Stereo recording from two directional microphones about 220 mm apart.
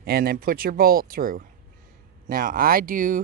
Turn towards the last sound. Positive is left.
turn(degrees=-40)  # may be behind; listen again after turning